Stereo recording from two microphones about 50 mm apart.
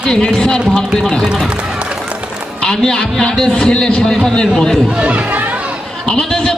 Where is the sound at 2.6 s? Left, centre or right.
Centre.